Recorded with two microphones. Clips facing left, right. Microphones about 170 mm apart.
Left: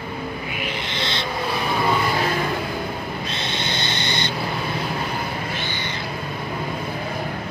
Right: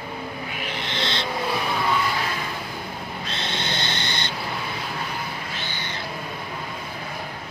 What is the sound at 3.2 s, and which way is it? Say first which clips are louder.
Owl: left 2 dB; 15° left (ahead or behind).